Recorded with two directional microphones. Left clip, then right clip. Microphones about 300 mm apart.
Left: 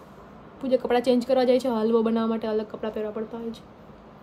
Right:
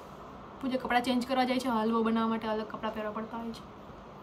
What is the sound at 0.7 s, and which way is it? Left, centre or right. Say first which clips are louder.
A woman's voice: left 8 dB; left.